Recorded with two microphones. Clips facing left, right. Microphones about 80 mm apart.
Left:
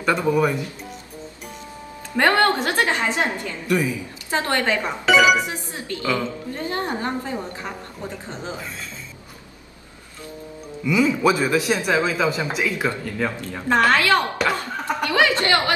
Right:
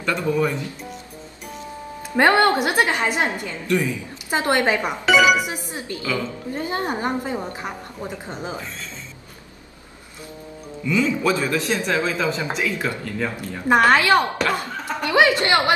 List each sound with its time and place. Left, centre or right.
0.0 s speech: centre
2.1 s a woman's voice: centre
3.6 s speech: centre
4.3 s a woman's voice: centre
5.0 s speech: centre
5.5 s a woman's voice: centre
10.9 s speech: centre
13.7 s a woman's voice: centre
15.0 s chuckle: right
15.4 s a woman's voice: right